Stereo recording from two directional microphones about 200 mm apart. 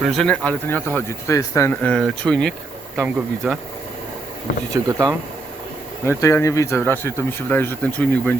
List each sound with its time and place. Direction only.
0.0 s speech: centre (ahead or behind)
4.7 s speech: 15° right (ahead or behind)
6.1 s speech: 15° left (ahead or behind)